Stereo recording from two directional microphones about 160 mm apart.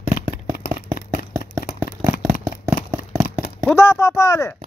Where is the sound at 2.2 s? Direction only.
20° right (ahead or behind).